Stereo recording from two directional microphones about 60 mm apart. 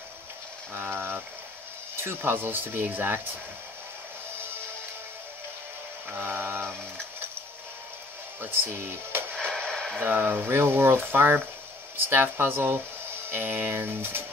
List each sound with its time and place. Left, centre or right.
0.7 s speech: right
6.1 s speech: right
8.4 s speech: right
9.3 s radio: centre
9.9 s speech: right